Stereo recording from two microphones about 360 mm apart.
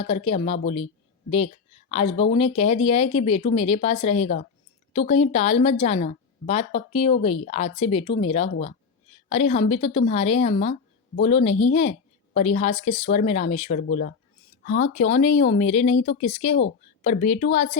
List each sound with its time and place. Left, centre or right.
0.0 s a woman's voice: centre
1.9 s a woman's voice: centre